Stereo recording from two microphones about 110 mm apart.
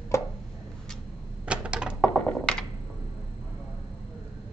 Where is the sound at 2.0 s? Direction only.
10° left (ahead or behind).